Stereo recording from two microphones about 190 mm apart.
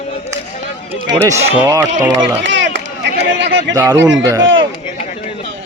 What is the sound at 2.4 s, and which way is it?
Speech, 70° right (ahead or behind).